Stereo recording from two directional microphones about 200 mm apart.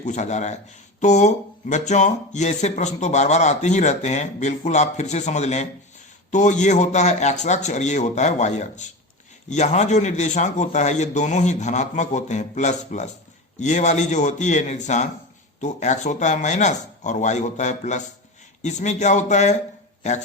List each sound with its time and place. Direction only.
0.0 s a man's voice: 35° left (ahead or behind)